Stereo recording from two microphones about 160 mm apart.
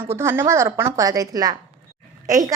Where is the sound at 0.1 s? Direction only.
15° right (ahead or behind).